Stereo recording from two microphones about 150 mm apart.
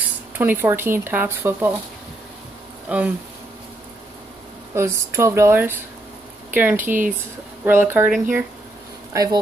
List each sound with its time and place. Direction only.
0.4 s speech: 15° right (ahead or behind)
2.9 s speech: 10° right (ahead or behind)
4.7 s speech: 20° right (ahead or behind)
9.1 s speech: 25° right (ahead or behind)